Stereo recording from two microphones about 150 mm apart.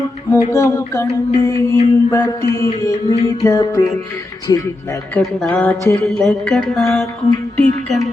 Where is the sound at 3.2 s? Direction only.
25° left (ahead or behind).